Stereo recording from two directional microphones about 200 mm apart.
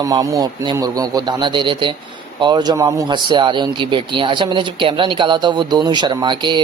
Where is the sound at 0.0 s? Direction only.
15° right (ahead or behind).